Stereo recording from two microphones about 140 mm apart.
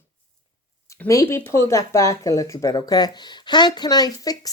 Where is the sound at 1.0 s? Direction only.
20° left (ahead or behind).